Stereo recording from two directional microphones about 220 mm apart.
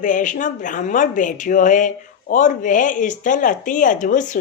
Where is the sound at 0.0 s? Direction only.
35° left (ahead or behind).